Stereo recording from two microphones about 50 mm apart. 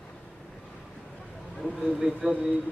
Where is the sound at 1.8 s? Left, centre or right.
Centre.